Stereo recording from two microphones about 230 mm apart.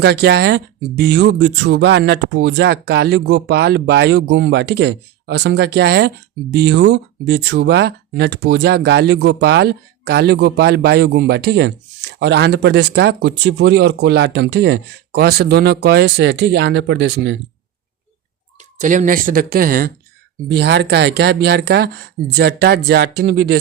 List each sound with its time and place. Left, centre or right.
0.0 s speech: right
18.8 s speech: right